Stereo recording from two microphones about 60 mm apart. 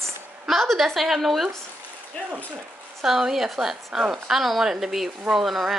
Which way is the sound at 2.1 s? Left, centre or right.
Left.